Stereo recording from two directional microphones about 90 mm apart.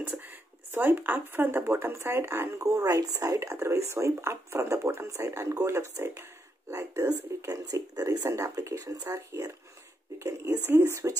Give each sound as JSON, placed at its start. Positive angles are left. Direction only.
{"t": 0.2, "sound": "speech", "side_deg": -25}
{"t": 2.6, "sound": "speech", "side_deg": -40}
{"t": 7.4, "sound": "speech", "side_deg": -40}